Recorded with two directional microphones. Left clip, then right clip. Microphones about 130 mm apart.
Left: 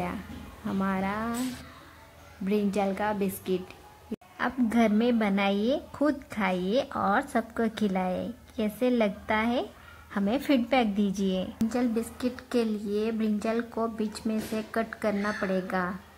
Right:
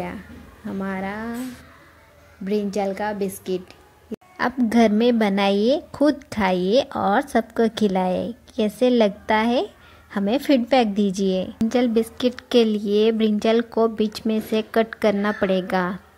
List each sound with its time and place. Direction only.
0.7 s a woman's voice: 20° right (ahead or behind)
2.4 s a woman's voice: 20° right (ahead or behind)
4.4 s a woman's voice: 40° right (ahead or behind)
14.2 s speech: 45° right (ahead or behind)